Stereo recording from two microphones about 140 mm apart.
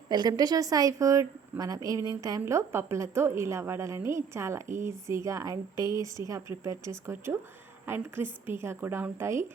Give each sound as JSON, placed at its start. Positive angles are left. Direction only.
{"t": 0.1, "sound": "speech", "side_deg": -30}